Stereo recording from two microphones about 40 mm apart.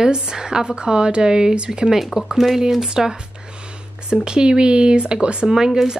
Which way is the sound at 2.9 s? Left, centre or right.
Right.